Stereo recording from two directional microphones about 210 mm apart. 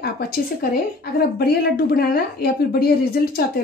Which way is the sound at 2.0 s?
45° left (ahead or behind).